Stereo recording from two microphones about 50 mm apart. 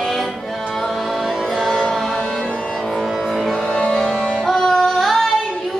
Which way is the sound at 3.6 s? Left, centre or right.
Left.